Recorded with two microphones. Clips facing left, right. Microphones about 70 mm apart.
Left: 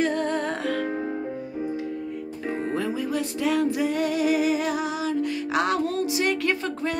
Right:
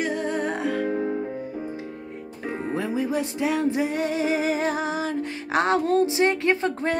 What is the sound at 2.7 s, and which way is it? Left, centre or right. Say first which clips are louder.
Music: right 3 dB; right.